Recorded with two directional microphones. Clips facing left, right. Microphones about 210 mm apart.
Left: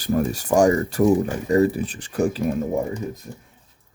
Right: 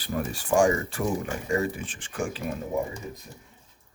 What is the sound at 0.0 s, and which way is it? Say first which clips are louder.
Speech: left 9 dB; 45° left (ahead or behind).